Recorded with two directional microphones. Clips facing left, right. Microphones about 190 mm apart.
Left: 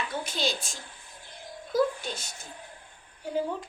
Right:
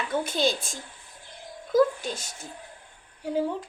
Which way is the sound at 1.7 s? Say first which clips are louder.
Right 5 dB; 45° right (ahead or behind).